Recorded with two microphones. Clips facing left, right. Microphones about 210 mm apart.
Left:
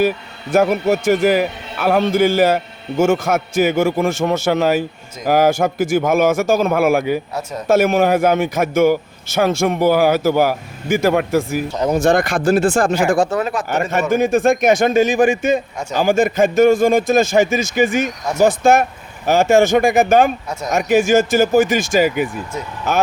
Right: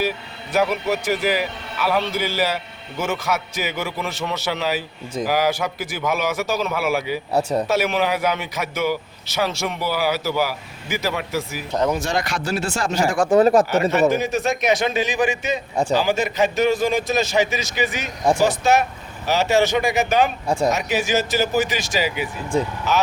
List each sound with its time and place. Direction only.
0.5 s a man's voice: 45° left (ahead or behind)
13.4 s speech: 40° right (ahead or behind)
14.1 s a man's voice: 50° left (ahead or behind)